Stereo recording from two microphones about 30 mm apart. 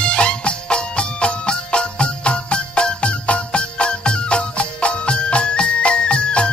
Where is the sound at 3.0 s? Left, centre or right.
Left.